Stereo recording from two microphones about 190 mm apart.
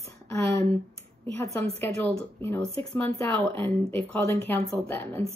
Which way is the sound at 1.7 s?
15° left (ahead or behind).